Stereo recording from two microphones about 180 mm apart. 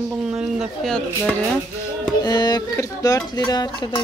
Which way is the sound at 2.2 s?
20° left (ahead or behind).